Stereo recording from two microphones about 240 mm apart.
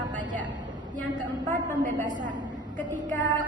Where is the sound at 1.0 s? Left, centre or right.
Right.